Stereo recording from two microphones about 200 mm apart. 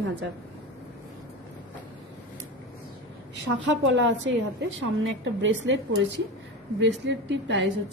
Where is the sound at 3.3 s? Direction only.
65° right (ahead or behind).